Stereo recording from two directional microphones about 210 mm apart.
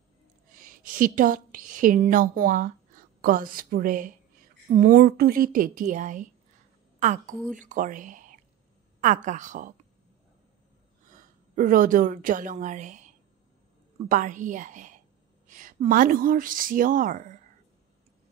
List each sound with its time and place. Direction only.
0.5 s a woman's voice: 40° right (ahead or behind)
11.1 s a woman's voice: 40° right (ahead or behind)